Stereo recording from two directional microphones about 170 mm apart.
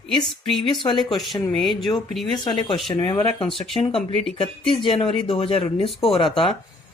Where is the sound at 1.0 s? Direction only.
Centre (ahead or behind).